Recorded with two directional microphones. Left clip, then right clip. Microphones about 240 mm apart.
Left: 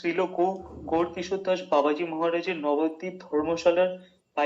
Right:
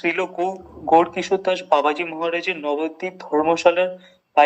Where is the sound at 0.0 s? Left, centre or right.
Right.